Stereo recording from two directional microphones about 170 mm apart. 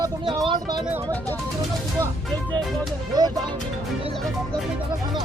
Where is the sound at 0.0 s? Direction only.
25° right (ahead or behind).